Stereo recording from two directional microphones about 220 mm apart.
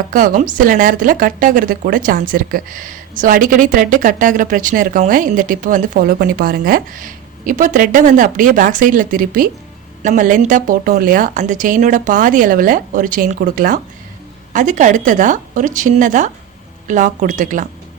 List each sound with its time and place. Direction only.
0.1 s speech: 35° right (ahead or behind)